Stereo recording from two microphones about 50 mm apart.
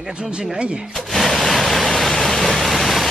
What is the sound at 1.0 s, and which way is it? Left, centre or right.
Pink noise, centre.